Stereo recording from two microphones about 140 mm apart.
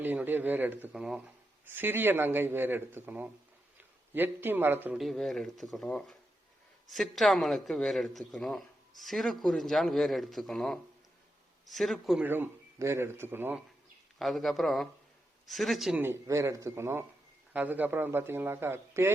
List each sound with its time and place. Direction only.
0.0 s a man's voice: 15° right (ahead or behind)
4.9 s a man's voice: centre (ahead or behind)
12.2 s a man's voice: 15° right (ahead or behind)
14.2 s a man's voice: centre (ahead or behind)
16.0 s a man's voice: 20° right (ahead or behind)